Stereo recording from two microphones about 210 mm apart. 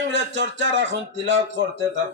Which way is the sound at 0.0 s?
55° right (ahead or behind).